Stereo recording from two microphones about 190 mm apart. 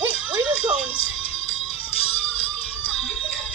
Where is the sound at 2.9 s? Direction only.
Centre (ahead or behind).